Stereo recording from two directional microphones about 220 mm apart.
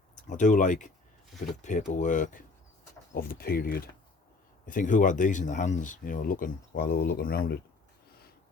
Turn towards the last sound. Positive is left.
turn(degrees=45)  # may be behind; listen again after turning